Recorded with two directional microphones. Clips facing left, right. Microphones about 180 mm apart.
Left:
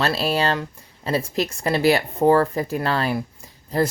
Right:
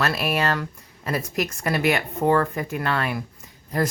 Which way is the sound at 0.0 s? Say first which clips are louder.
Left 2 dB; 30° left (ahead or behind).